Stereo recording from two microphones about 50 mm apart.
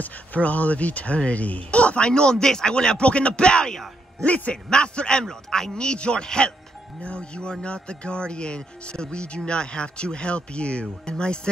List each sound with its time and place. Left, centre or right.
0.0 s speech: left